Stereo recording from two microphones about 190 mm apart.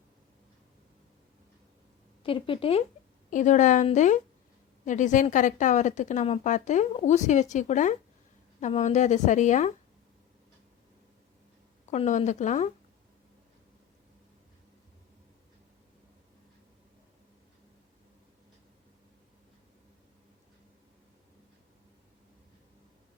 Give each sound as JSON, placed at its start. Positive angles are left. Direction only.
{"t": 2.2, "sound": "speech", "side_deg": 30}
{"t": 3.2, "sound": "a woman's voice", "side_deg": 40}
{"t": 11.9, "sound": "a woman's voice", "side_deg": 40}